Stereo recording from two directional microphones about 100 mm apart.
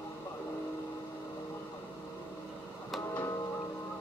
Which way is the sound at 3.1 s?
25° left (ahead or behind).